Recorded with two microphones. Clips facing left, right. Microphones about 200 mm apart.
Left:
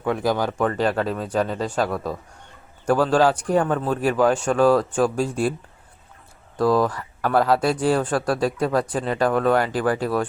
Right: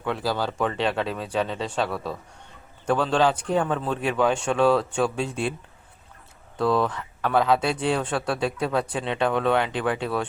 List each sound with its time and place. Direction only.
0.2 s a man's voice: 15° left (ahead or behind)
0.6 s a man's voice: centre (ahead or behind)
6.6 s speech: 5° left (ahead or behind)